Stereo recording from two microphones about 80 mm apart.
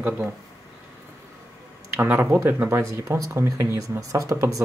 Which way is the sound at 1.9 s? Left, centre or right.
Right.